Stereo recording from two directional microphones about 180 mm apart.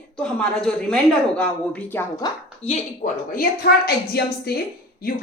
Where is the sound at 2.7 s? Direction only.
50° left (ahead or behind).